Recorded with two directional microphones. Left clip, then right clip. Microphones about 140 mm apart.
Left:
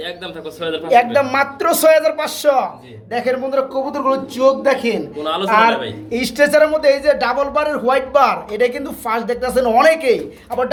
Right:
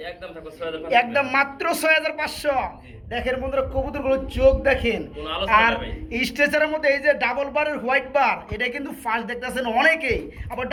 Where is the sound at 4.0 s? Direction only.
20° right (ahead or behind).